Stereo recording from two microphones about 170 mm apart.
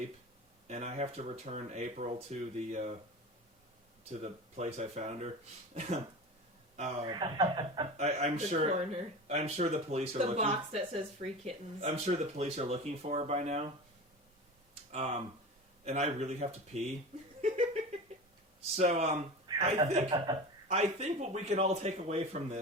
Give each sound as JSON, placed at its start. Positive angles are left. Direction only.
{"t": 0.7, "sound": "speech", "side_deg": -40}
{"t": 4.1, "sound": "speech", "side_deg": -40}
{"t": 7.1, "sound": "speech", "side_deg": -30}
{"t": 7.9, "sound": "speech", "side_deg": -40}
{"t": 14.9, "sound": "speech", "side_deg": -40}
{"t": 18.8, "sound": "speech", "side_deg": -40}
{"t": 19.5, "sound": "chuckle", "side_deg": -25}
{"t": 19.8, "sound": "speech", "side_deg": -40}